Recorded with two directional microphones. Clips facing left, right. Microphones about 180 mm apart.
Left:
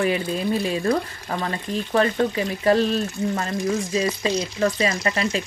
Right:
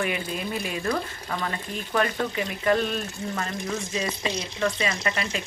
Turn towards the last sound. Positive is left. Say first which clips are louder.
# left 5 dB
turn(degrees=35)  # may be behind; listen again after turning